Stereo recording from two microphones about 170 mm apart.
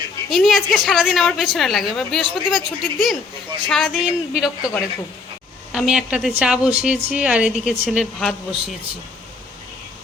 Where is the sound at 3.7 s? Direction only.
Centre (ahead or behind).